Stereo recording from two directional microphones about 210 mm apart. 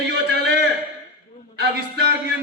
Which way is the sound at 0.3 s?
50° right (ahead or behind).